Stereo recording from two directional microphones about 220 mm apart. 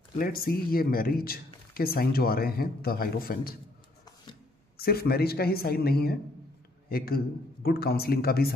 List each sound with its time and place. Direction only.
0.2 s speech: 40° left (ahead or behind)
4.7 s a man's voice: 45° left (ahead or behind)